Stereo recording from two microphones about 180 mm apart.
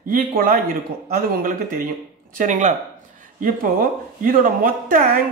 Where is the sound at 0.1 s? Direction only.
55° right (ahead or behind).